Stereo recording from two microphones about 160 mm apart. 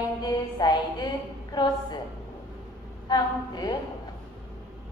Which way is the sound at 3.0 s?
25° left (ahead or behind).